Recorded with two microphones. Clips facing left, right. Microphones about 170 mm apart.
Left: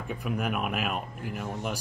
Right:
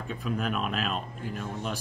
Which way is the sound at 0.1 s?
15° left (ahead or behind).